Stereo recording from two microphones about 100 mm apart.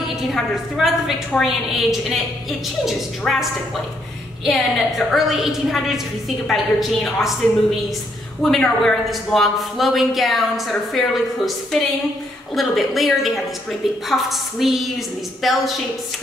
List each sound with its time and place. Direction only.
0.2 s a man's voice: centre (ahead or behind)
4.5 s a man's voice: centre (ahead or behind)
8.4 s a man's voice: 5° left (ahead or behind)